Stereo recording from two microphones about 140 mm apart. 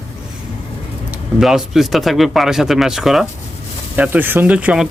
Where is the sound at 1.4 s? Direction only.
Centre (ahead or behind).